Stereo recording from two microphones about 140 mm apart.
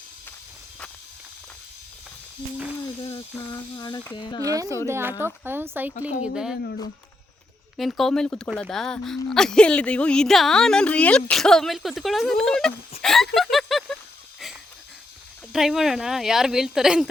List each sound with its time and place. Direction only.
3.0 s speech: 30° left (ahead or behind)
4.4 s speech: 25° right (ahead or behind); by 6.6 s 5° right (ahead or behind)
7.8 s speech: centre (ahead or behind)
13.0 s a sound: 5° left (ahead or behind)
15.5 s speech: centre (ahead or behind)